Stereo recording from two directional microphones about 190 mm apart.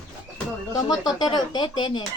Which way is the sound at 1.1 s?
20° left (ahead or behind).